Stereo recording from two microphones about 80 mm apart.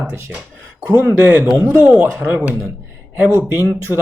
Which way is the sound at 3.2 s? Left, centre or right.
Right.